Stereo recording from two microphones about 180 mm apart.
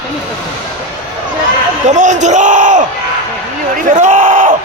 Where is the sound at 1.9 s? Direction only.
40° right (ahead or behind).